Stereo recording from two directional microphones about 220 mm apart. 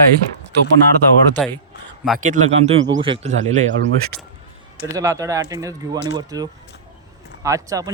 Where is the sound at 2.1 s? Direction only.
35° right (ahead or behind).